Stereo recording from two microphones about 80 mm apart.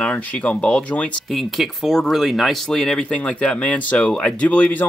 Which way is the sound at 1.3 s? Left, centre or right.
Centre.